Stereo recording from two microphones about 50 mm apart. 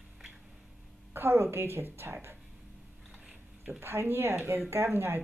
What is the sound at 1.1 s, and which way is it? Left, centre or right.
Speech, right.